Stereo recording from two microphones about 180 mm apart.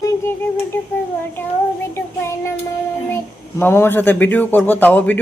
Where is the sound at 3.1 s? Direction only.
15° left (ahead or behind).